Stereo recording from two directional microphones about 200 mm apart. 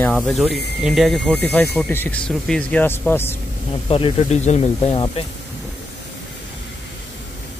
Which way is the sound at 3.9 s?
30° left (ahead or behind).